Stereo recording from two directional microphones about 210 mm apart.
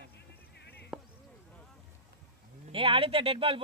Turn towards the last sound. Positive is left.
turn(degrees=-25)  # may be behind; listen again after turning